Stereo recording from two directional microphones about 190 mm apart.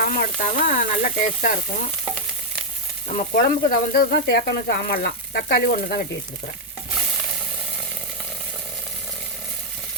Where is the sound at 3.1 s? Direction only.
50° left (ahead or behind).